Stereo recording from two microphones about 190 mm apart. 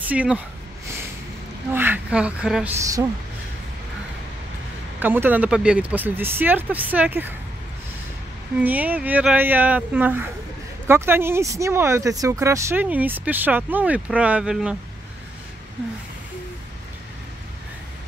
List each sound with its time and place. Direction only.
0.1 s speech: 5° right (ahead or behind)
1.7 s a woman's voice: 10° right (ahead or behind)
2.8 s speech: 15° right (ahead or behind)
5.0 s speech: 10° right (ahead or behind)
8.6 s speech: 10° right (ahead or behind)